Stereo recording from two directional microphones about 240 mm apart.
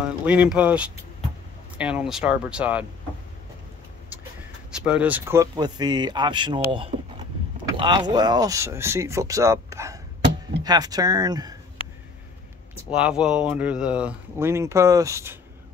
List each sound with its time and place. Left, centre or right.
0.0 s speech: centre
4.6 s speech: centre; by 6.9 s right
7.6 s boat: centre
8.1 s speech: centre
12.9 s speech: centre